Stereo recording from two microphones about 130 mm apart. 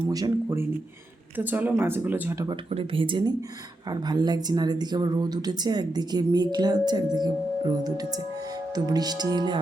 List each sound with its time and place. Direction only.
0.1 s speech: 30° right (ahead or behind)
1.4 s speech: 15° right (ahead or behind)
2.5 s speech: 45° right (ahead or behind)